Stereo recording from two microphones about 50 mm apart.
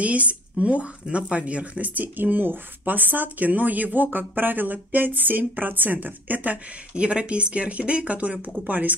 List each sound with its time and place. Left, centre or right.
0.0 s speech: right